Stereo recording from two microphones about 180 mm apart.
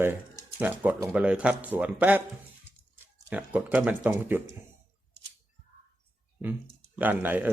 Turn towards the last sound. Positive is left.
turn(degrees=-10)  # may be behind; listen again after turning